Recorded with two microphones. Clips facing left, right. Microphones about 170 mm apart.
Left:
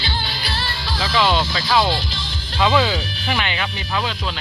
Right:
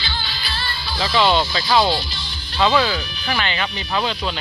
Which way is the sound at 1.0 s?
5° left (ahead or behind).